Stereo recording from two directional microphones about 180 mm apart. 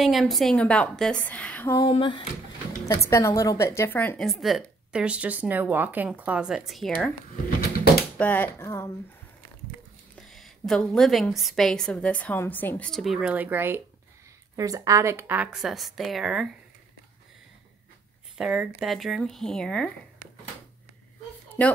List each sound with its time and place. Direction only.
0.0 s a woman's voice: centre (ahead or behind)
1.9 s speech: 30° left (ahead or behind)
2.9 s a woman's voice: 15° left (ahead or behind)
4.3 s speech: centre (ahead or behind)
8.2 s a woman's voice: 10° left (ahead or behind)
10.1 s a woman's voice: centre (ahead or behind)
18.4 s a woman's voice: 5° right (ahead or behind)
21.6 s a woman's voice: 10° left (ahead or behind)